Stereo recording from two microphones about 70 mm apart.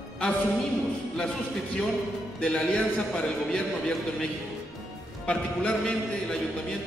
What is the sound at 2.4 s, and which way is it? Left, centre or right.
A man's voice, centre.